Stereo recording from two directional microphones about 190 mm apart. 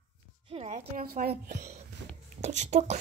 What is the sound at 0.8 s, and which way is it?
Speech, 50° right (ahead or behind).